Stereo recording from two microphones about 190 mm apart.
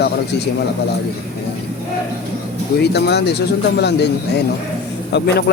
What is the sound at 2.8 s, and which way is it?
Speech, 60° left (ahead or behind).